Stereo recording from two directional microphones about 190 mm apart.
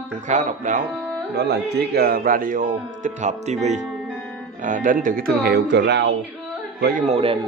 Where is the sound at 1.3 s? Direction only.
60° right (ahead or behind).